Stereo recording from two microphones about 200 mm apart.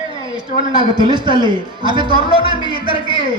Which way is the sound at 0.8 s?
25° right (ahead or behind).